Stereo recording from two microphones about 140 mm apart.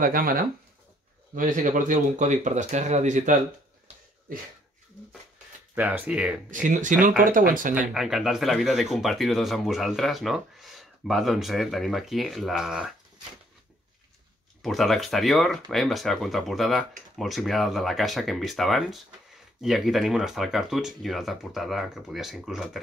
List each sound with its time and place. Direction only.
0.0 s speech: 90° right
1.3 s speech: 65° right (ahead or behind)
5.8 s speech: 10° right (ahead or behind)
6.5 s speech: 65° right (ahead or behind)
7.2 s speech: 75° right (ahead or behind)
7.7 s speech: 5° right (ahead or behind)
14.6 s speech: centre (ahead or behind)